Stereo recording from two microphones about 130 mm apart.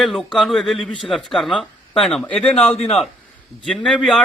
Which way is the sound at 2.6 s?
55° left (ahead or behind).